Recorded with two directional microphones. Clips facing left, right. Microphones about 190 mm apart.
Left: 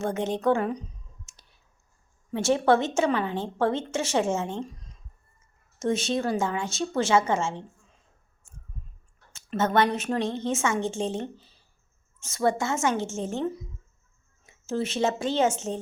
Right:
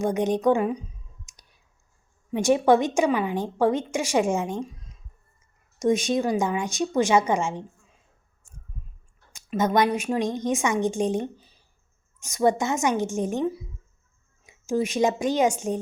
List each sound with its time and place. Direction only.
0.0 s clicking: 15° right (ahead or behind)
2.3 s a woman's voice: 15° right (ahead or behind)
4.6 s a sound: centre (ahead or behind)
5.8 s a woman's voice: 15° right (ahead or behind)
9.3 s a woman's voice: 10° right (ahead or behind)